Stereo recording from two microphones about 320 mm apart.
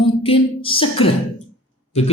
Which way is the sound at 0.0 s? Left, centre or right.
Centre.